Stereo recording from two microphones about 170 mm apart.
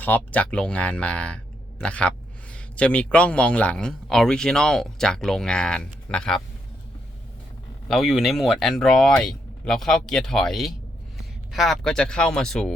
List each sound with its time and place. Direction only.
0.0 s speech: 10° left (ahead or behind)
7.9 s speech: centre (ahead or behind)